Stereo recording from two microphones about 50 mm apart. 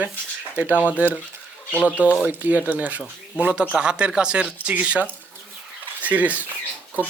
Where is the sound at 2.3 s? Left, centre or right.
Right.